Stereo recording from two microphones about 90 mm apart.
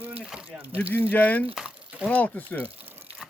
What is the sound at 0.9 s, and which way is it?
Speech, 20° left (ahead or behind).